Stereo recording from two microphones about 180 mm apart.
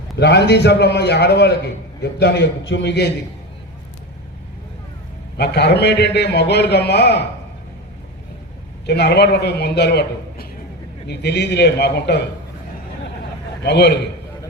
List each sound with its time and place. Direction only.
0.2 s a man's voice: 70° left (ahead or behind)
5.4 s a man's voice: 65° left (ahead or behind)
8.9 s a man's voice: 65° left (ahead or behind)
13.6 s a man's voice: 70° left (ahead or behind)